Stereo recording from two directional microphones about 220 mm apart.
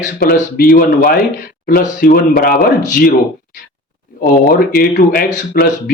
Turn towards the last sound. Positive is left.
turn(degrees=40)  # may be behind; listen again after turning